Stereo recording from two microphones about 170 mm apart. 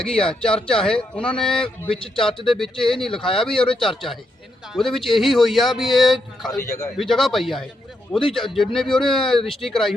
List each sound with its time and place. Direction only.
0.0 s speech: 5° left (ahead or behind)
6.6 s a man's voice: 20° left (ahead or behind)
6.9 s speech: centre (ahead or behind)